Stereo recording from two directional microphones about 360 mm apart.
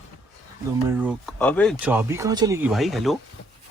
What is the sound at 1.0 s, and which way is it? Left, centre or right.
Speech, centre.